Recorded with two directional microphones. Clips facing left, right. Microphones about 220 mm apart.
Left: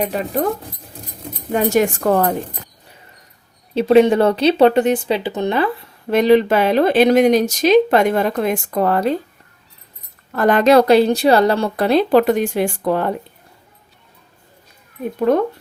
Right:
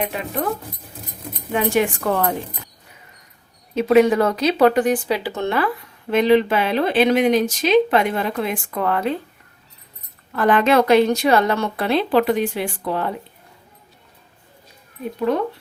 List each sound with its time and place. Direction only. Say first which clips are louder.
0.1 s a woman's voice: left 5 dB; 35° left (ahead or behind)
1.5 s speech: left 3 dB; 40° left (ahead or behind)
3.8 s speech: left 3 dB; 30° left (ahead or behind)
6.1 s speech: left 3 dB; 40° left (ahead or behind)
10.3 s a woman's voice: left 4 dB; 40° left (ahead or behind)
15.3 s speech: left 5 dB; 50° left (ahead or behind)